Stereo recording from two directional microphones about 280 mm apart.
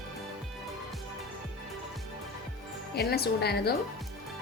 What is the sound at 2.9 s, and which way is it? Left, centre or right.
Speech, left.